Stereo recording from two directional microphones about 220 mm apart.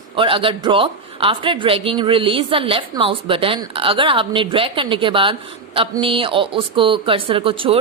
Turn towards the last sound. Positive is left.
turn(degrees=-25)  # may be behind; listen again after turning